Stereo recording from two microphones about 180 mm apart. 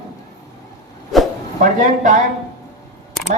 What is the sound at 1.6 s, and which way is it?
Speech, 45° right (ahead or behind).